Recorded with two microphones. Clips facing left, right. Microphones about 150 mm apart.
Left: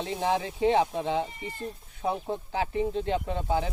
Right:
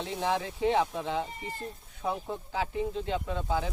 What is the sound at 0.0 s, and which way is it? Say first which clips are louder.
Speech: left 3 dB; 20° left (ahead or behind).